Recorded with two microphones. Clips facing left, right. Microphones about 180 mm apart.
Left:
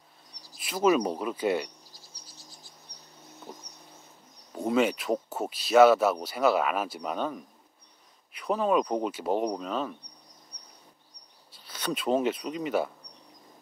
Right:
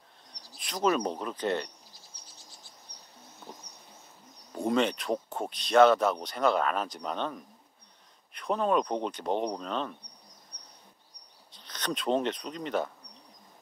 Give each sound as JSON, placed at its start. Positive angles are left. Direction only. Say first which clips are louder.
{"t": 0.6, "sound": "speech", "louder": "left 4 dB", "side_deg": 5}
{"t": 4.6, "sound": "speech", "louder": "left 2 dB", "side_deg": 5}
{"t": 10.5, "sound": "a sound", "louder": "even", "side_deg": 10}
{"t": 11.5, "sound": "speech", "louder": "left 2 dB", "side_deg": 5}